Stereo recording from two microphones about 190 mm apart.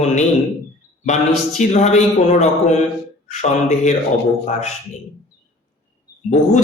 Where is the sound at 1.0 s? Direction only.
40° left (ahead or behind).